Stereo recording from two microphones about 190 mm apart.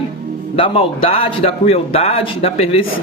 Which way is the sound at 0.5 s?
30° left (ahead or behind).